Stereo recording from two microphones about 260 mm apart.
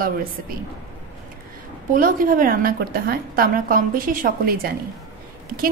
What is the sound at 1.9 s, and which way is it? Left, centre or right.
A woman's voice, right.